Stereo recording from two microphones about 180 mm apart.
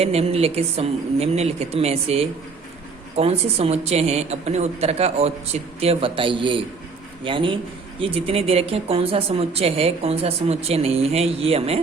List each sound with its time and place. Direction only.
0.0 s speech: 35° right (ahead or behind)